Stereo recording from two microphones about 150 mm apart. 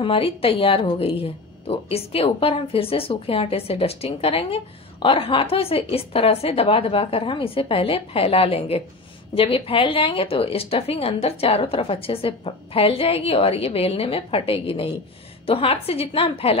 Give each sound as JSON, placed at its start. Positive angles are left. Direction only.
{"t": 0.0, "sound": "a woman's voice", "side_deg": 40}